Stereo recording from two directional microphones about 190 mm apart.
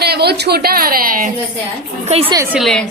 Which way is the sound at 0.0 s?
60° right (ahead or behind).